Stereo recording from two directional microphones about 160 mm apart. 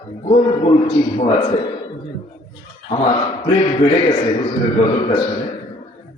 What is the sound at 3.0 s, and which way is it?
A man's voice, 30° left (ahead or behind).